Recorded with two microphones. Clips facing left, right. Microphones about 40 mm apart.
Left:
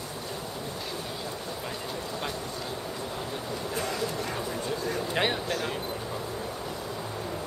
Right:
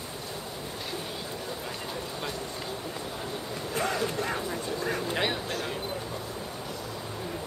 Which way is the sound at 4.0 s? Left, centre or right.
Centre.